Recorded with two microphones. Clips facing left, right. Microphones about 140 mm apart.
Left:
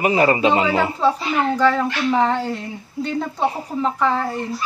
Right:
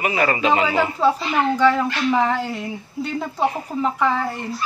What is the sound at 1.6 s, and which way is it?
Speech, centre (ahead or behind).